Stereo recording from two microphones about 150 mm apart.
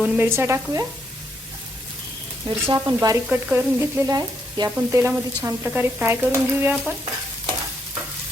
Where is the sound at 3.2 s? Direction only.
15° right (ahead or behind).